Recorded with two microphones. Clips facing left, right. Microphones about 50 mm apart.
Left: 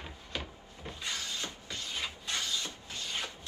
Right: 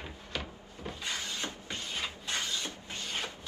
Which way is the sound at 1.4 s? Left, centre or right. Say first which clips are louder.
Right 2 dB; right.